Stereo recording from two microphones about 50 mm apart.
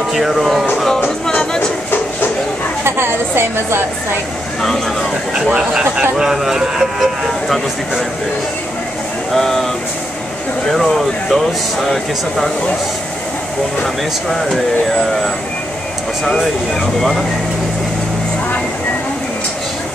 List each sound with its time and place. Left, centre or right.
0.1 s speech: centre
1.3 s a sound: centre
2.8 s a sound: right
4.6 s speech: centre
5.5 s speech: right
6.1 s speech: centre
7.0 s speech: centre
9.3 s speech: centre
10.7 s speech: centre